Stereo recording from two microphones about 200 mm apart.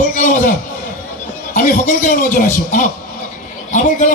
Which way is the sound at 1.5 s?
45° left (ahead or behind).